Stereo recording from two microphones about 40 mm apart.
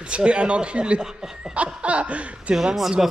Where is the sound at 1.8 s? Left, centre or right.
Right.